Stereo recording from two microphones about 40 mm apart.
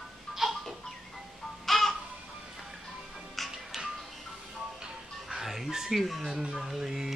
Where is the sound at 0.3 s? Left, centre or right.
Centre.